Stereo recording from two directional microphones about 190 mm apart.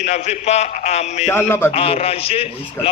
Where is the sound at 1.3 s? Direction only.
10° left (ahead or behind).